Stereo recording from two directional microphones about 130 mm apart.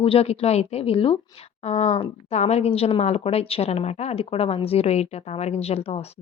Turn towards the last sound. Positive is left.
turn(degrees=50)  # may be behind; listen again after turning